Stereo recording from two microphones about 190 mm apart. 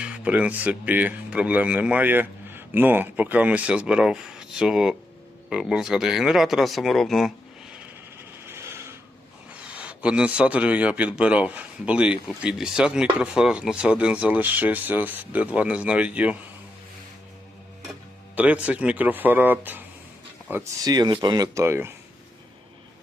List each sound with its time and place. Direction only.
0.0 s speech: 5° right (ahead or behind)
8.4 s a sound: 15° right (ahead or behind)
9.5 s speech: 5° right (ahead or behind)
18.3 s speech: 5° right (ahead or behind)